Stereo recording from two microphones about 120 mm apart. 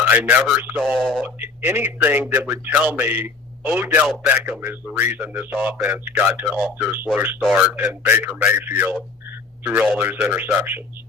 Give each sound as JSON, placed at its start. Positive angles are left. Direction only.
{"t": 0.0, "sound": "speech", "side_deg": -15}
{"t": 0.8, "sound": "speech", "side_deg": 0}
{"t": 1.2, "sound": "a man's voice", "side_deg": -15}
{"t": 10.0, "sound": "a man's voice", "side_deg": -15}